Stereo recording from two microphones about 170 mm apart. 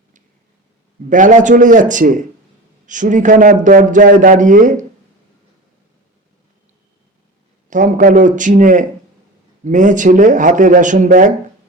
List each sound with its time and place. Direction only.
1.1 s a man's voice: 50° right (ahead or behind)
7.7 s a man's voice: 50° right (ahead or behind)